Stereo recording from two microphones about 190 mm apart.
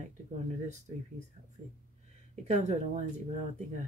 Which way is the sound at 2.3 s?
35° right (ahead or behind).